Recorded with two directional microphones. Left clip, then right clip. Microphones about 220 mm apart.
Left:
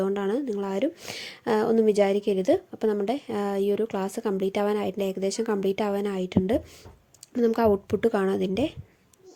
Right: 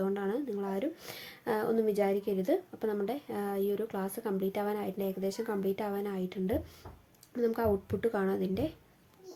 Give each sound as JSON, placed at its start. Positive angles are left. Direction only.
{"t": 0.0, "sound": "speech", "side_deg": 40}